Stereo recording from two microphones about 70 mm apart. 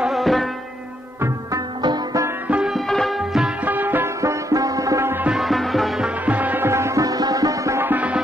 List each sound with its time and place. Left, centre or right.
0.0 s music: centre
2.4 s music: centre
2.7 s music: centre
3.6 s music: right
4.2 s music: right
5.0 s music: right
5.3 s music: centre
6.0 s music: right
6.7 s music: right
7.8 s music: right